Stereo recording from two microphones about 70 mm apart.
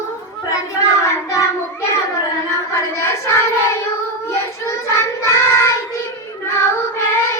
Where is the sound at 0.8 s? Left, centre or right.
Left.